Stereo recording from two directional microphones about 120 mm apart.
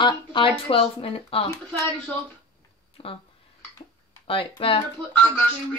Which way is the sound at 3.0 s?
50° left (ahead or behind).